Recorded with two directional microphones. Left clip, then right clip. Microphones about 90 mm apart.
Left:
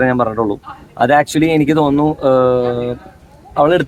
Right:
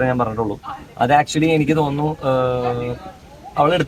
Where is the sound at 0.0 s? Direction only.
25° left (ahead or behind).